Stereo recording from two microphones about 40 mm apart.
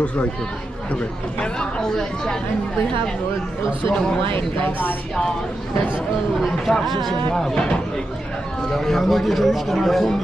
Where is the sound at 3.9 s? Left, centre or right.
Centre.